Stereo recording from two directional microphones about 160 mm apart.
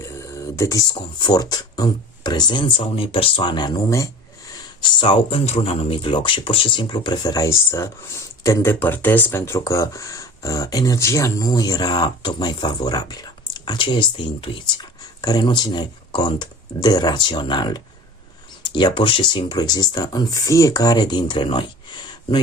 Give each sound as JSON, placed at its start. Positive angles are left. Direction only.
{"t": 0.0, "sound": "speech", "side_deg": 20}